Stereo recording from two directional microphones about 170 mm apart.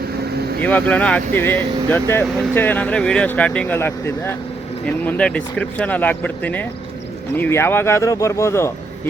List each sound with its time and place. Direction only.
0.3 s motorboat: 70° right (ahead or behind)
0.6 s speech: 10° left (ahead or behind)